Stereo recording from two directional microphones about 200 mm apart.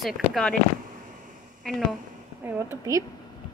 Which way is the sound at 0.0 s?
Centre (ahead or behind).